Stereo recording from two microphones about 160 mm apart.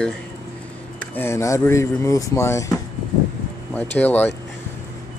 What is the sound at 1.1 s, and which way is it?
Speech, 15° left (ahead or behind).